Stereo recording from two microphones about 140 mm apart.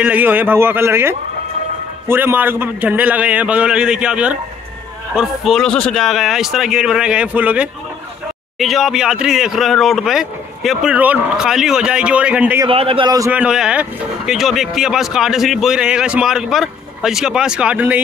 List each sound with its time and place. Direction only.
0.0 s a man's voice: 10° right (ahead or behind)
12.6 s a man's voice: 40° right (ahead or behind)
13.3 s speech: 5° right (ahead or behind)